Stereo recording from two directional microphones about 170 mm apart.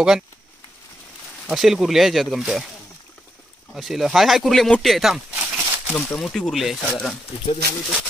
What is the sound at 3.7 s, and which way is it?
Speech, centre (ahead or behind).